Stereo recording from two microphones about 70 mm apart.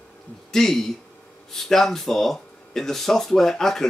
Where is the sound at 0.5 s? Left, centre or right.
Centre.